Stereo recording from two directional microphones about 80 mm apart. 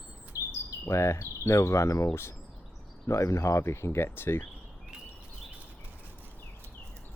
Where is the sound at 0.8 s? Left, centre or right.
Left.